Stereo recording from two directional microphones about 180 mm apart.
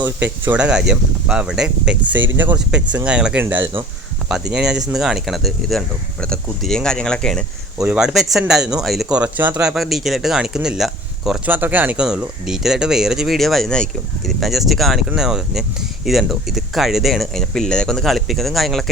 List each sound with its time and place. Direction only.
0.0 s speech: 10° right (ahead or behind)
2.1 s speech: 90° right
2.4 s speech: 10° right (ahead or behind)
7.8 s speech: 5° right (ahead or behind)